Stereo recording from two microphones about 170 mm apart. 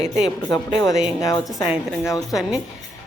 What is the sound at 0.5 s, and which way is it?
Speech, 20° left (ahead or behind).